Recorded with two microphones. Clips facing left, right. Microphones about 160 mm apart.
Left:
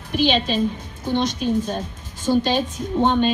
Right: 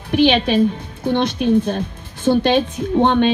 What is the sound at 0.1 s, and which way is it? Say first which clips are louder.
A woman's voice: right 6 dB; 65° right (ahead or behind).